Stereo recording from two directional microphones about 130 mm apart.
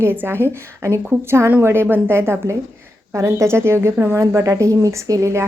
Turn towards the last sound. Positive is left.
turn(degrees=-25)  # may be behind; listen again after turning